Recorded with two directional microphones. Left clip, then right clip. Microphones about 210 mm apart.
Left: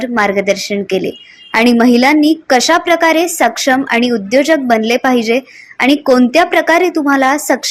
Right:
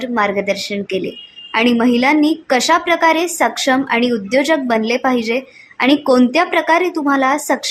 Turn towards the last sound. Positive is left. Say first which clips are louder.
# left 3 dB
turn(degrees=15)  # may be behind; listen again after turning